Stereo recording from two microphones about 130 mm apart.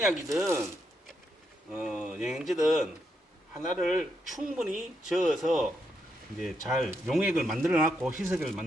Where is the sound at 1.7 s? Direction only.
10° right (ahead or behind).